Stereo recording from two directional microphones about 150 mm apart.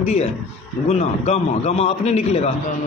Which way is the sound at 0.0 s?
45° left (ahead or behind).